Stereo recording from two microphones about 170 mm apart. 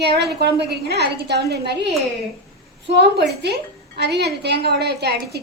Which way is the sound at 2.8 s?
90° right.